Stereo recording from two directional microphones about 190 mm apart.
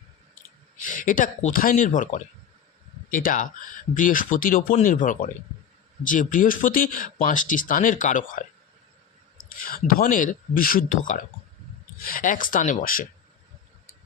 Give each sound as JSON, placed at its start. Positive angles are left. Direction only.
{"t": 0.8, "sound": "speech", "side_deg": 45}
{"t": 9.6, "sound": "speech", "side_deg": 50}